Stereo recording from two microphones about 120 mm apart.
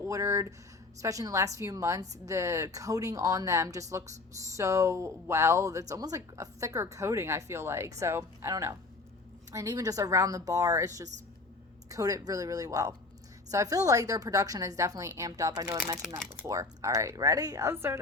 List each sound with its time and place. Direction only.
0.0 s a woman's voice: 25° right (ahead or behind)